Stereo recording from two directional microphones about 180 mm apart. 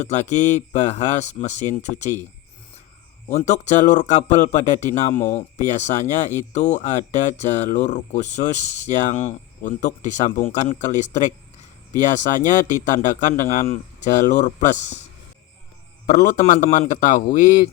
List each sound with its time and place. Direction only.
0.1 s speech: 40° left (ahead or behind)
3.3 s speech: 40° left (ahead or behind)
5.1 s speech: 15° left (ahead or behind)
5.6 s speech: 40° left (ahead or behind)
8.5 s speech: 90° right
9.0 s speech: 40° left (ahead or behind)
16.0 s speech: 45° left (ahead or behind)